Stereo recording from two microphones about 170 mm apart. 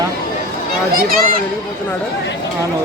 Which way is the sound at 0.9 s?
60° right (ahead or behind).